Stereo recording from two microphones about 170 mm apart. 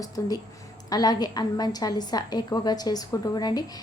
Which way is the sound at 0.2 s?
20° left (ahead or behind).